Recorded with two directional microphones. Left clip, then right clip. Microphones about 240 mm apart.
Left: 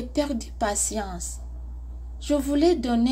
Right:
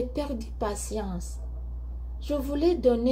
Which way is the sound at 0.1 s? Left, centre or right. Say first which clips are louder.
Left 6 dB; centre.